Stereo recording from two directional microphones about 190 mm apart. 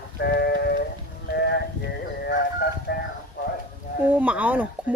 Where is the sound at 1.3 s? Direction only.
60° left (ahead or behind).